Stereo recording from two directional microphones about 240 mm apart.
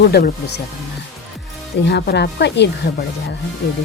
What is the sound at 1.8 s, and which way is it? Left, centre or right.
Speech, left.